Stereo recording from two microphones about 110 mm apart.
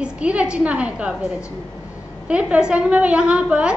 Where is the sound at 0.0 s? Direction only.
10° right (ahead or behind).